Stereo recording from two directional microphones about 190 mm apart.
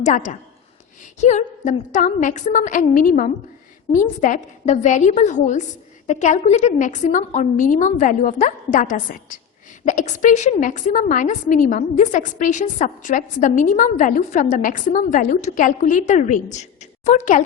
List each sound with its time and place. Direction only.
0.0 s a woman's voice: 40° left (ahead or behind)